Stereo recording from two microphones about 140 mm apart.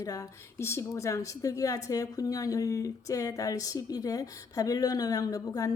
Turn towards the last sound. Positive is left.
turn(degrees=25)  # may be behind; listen again after turning